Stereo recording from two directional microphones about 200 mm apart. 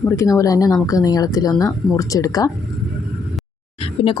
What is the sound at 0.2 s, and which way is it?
Speech, 15° left (ahead or behind).